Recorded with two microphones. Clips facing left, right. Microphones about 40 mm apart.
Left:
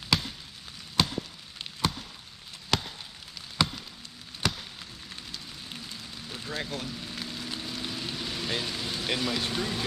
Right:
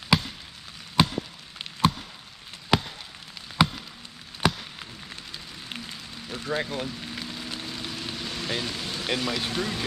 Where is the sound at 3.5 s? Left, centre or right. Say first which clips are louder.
Right 5 dB; centre.